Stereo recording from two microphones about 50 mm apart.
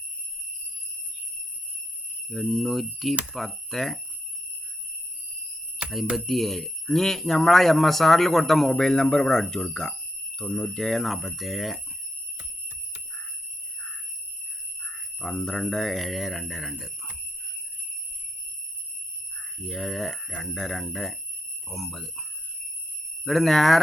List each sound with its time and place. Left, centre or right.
2.3 s speech: centre
6.1 s speech: centre
15.2 s speech: centre
19.6 s speech: centre
23.2 s speech: centre